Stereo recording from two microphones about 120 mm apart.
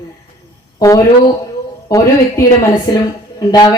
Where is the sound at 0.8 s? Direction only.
30° left (ahead or behind).